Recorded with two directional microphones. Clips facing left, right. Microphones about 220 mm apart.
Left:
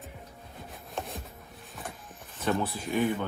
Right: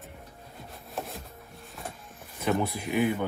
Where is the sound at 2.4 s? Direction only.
15° right (ahead or behind).